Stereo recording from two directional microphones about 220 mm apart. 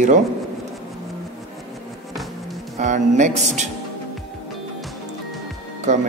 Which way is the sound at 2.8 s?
35° right (ahead or behind).